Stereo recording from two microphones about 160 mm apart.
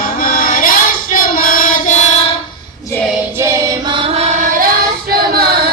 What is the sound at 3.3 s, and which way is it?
Music, 15° right (ahead or behind).